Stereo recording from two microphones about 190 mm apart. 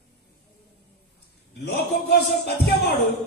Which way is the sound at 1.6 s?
60° left (ahead or behind).